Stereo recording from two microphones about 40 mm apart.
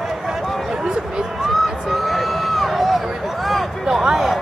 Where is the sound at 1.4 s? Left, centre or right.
Centre.